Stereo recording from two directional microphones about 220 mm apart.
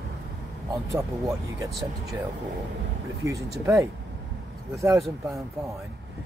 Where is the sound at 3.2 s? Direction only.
15° right (ahead or behind).